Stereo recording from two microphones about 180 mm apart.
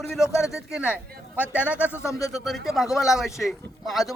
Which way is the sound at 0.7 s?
5° right (ahead or behind).